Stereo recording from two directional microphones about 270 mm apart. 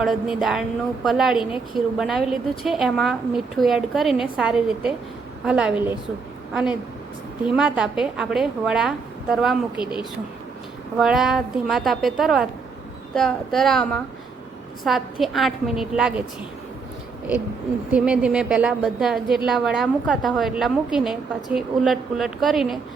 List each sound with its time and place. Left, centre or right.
0.0 s a woman's voice: centre
9.8 s speech: centre
10.9 s a woman's voice: centre
17.9 s a woman's voice: centre